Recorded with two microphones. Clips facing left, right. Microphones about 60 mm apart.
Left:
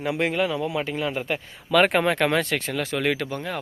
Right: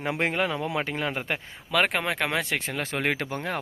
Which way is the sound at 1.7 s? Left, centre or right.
Centre.